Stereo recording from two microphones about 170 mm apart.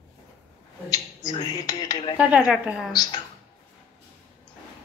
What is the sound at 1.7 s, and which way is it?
Speech, 25° left (ahead or behind).